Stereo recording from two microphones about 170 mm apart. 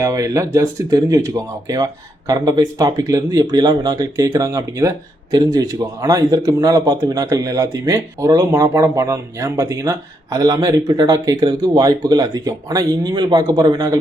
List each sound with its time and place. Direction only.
0.0 s speech: 20° right (ahead or behind)